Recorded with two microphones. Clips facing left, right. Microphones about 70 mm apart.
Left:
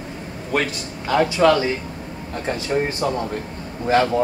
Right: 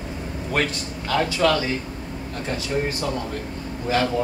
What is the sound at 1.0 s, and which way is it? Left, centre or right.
Speech, centre.